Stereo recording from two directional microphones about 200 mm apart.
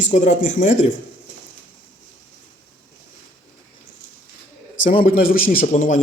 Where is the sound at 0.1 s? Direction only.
35° left (ahead or behind).